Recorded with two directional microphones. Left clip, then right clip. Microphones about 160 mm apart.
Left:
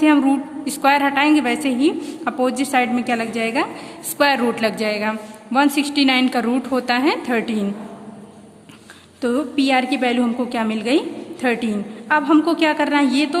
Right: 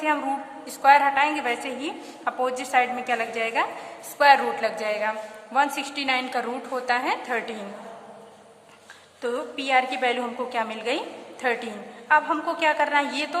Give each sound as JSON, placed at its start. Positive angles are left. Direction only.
{"t": 0.6, "sound": "a woman's voice", "side_deg": 25}
{"t": 9.2, "sound": "a woman's voice", "side_deg": 30}